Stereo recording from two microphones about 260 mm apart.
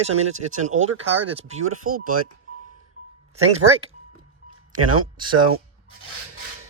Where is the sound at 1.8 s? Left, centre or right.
Right.